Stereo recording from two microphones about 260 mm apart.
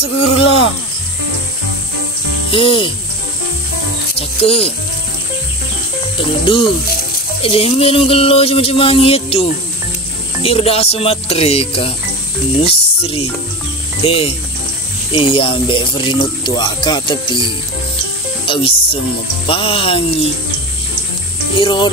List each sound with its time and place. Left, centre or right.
0.0 s insect: left
2.5 s speech: left
4.2 s speech: left
6.4 s speech: centre
18.4 s music: left
19.4 s speech: left
21.5 s speech: centre